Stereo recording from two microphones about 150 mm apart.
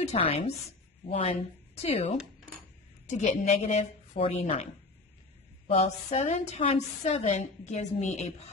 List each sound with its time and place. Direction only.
0.0 s a woman's voice: 40° left (ahead or behind)
5.7 s a woman's voice: 45° left (ahead or behind)